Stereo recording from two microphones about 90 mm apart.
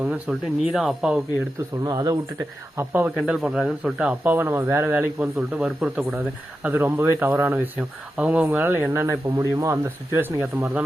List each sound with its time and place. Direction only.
0.3 s speech: centre (ahead or behind)
1.8 s speech: 45° right (ahead or behind)
2.7 s speech: 20° right (ahead or behind)
3.2 s speech: 5° right (ahead or behind)
4.1 s speech: 20° right (ahead or behind)
5.2 s speech: 10° right (ahead or behind)
6.6 s speech: 25° right (ahead or behind)